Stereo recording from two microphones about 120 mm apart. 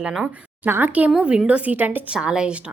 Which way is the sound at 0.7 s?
15° right (ahead or behind).